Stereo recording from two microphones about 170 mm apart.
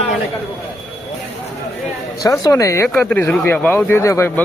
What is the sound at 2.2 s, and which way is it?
Speech, 20° left (ahead or behind).